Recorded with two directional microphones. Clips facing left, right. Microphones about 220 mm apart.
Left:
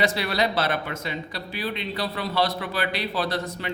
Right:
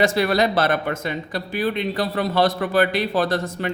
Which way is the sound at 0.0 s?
45° right (ahead or behind).